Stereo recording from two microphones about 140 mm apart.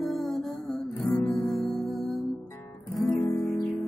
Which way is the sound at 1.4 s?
Centre (ahead or behind).